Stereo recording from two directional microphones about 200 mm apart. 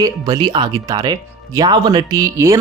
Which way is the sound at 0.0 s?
20° right (ahead or behind).